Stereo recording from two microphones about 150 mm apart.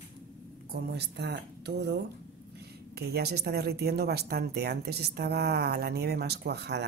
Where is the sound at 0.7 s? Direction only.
90° right.